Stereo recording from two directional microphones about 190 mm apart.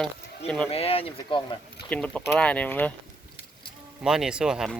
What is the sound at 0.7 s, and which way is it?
Speech, 30° left (ahead or behind).